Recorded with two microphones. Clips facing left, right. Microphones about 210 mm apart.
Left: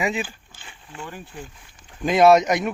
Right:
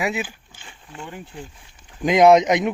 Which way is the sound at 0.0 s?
10° right (ahead or behind).